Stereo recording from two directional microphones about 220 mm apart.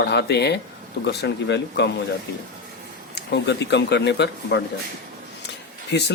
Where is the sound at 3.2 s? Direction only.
50° left (ahead or behind).